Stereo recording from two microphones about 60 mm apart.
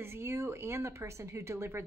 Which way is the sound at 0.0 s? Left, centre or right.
Right.